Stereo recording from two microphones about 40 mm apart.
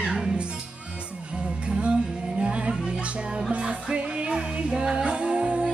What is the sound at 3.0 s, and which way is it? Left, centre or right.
Music, right.